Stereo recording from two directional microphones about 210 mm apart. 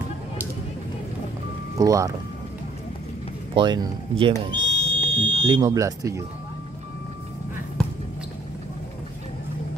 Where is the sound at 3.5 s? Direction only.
20° right (ahead or behind).